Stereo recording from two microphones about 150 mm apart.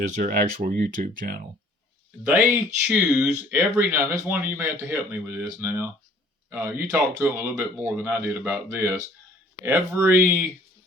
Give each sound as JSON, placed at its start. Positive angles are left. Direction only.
{"t": 0.2, "sound": "speech", "side_deg": -70}
{"t": 2.8, "sound": "speech", "side_deg": -5}